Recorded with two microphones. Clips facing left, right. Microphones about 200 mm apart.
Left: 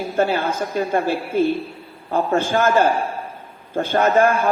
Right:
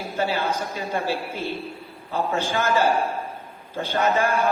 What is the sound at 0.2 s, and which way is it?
A man's voice, 55° left (ahead or behind).